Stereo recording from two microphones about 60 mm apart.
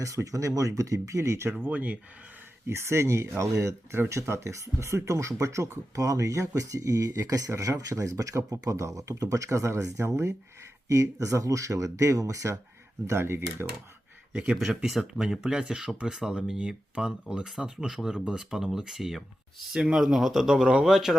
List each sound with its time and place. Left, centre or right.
0.0 s speech: right
1.7 s speech: right
2.6 s speech: right
6.0 s speech: right
13.1 s speech: right
14.3 s speech: centre
14.8 s speech: centre